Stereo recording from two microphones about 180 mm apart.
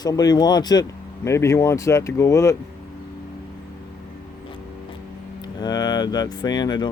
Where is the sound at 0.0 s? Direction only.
20° left (ahead or behind).